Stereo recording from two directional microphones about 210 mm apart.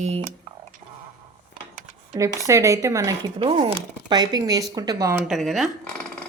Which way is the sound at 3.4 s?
25° right (ahead or behind).